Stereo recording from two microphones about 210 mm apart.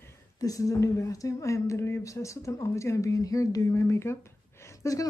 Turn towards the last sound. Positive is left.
turn(degrees=15)  # may be behind; listen again after turning